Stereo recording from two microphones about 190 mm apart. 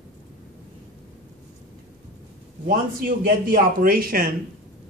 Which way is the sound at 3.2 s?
50° right (ahead or behind).